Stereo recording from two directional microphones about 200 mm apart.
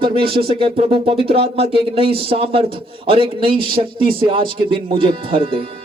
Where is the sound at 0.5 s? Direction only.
30° right (ahead or behind).